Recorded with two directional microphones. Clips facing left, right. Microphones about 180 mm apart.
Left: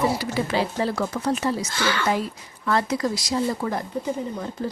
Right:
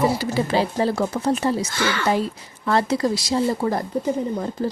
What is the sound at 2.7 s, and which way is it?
Speech, 30° right (ahead or behind).